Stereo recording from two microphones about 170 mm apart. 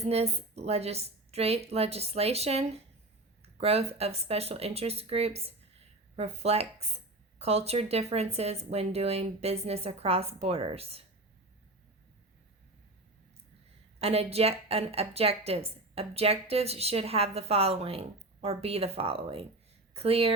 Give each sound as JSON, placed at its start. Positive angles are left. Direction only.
{"t": 0.0, "sound": "a woman's voice", "side_deg": -35}
{"t": 14.0, "sound": "a woman's voice", "side_deg": -35}